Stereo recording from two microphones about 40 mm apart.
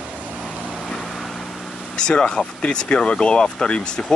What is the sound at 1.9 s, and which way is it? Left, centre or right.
Speech, left.